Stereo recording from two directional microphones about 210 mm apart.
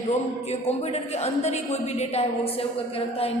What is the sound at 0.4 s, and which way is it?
A woman's voice, 30° left (ahead or behind).